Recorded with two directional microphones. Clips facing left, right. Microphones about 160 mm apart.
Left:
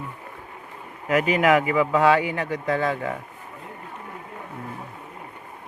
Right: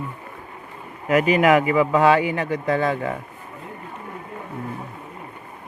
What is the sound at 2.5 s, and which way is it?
Speech, 50° right (ahead or behind).